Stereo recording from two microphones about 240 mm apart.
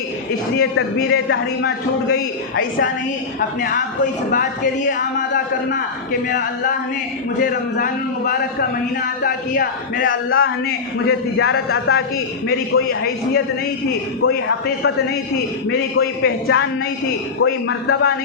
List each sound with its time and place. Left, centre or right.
0.6 s a man's voice: left
4.0 s a man's voice: left
9.2 s a man's voice: left
10.1 s a man's voice: left
12.7 s a man's voice: left
14.3 s a man's voice: left